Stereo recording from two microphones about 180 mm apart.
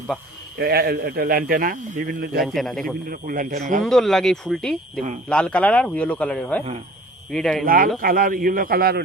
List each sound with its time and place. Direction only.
0.6 s a man's voice: 65° right (ahead or behind)
2.6 s speech: centre (ahead or behind)
3.1 s speech: 50° right (ahead or behind)
3.8 s a man's voice: centre (ahead or behind)
7.6 s speech: 50° right (ahead or behind)